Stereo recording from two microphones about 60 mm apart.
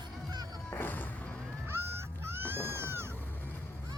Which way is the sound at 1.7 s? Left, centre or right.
Right.